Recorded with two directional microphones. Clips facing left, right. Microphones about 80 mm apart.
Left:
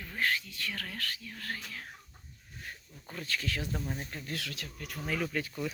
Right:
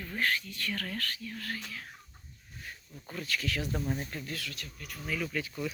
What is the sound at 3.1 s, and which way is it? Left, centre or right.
Speech, left.